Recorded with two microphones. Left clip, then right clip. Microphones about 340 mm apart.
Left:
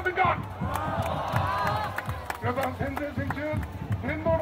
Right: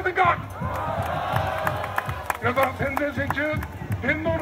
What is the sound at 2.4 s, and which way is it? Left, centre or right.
Speech, right.